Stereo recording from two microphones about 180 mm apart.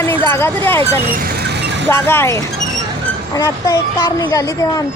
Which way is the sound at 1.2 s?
65° right (ahead or behind).